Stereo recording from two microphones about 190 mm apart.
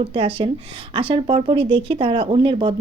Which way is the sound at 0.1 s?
30° right (ahead or behind).